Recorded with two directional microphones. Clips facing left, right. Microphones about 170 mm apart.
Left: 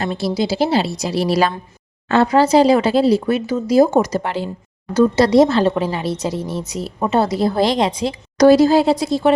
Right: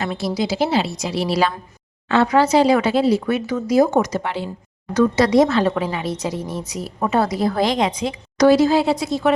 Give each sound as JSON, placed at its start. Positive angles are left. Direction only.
{"t": 0.0, "sound": "a woman's voice", "side_deg": 30}
{"t": 2.2, "sound": "a woman's voice", "side_deg": 30}